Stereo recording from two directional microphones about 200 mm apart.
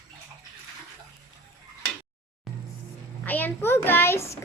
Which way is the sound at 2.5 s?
Centre (ahead or behind).